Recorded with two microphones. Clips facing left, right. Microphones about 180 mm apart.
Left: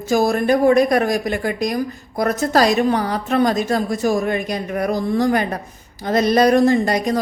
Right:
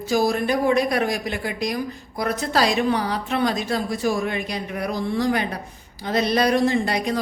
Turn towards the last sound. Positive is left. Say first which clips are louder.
# left 5 dB
turn(degrees=45)  # may be behind; listen again after turning